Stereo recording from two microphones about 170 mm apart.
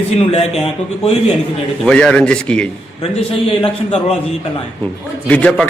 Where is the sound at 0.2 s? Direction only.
35° left (ahead or behind).